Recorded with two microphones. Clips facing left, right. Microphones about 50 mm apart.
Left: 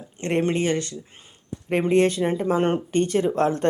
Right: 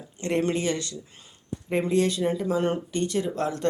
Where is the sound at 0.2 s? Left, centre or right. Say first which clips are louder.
Left 3 dB; left.